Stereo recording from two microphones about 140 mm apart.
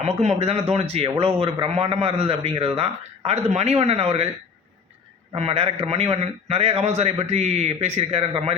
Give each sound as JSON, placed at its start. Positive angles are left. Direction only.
{"t": 0.2, "sound": "a man's voice", "side_deg": -50}
{"t": 5.3, "sound": "a man's voice", "side_deg": -45}